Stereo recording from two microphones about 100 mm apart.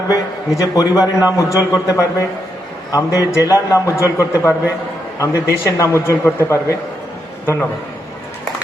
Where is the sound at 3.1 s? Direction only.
30° left (ahead or behind).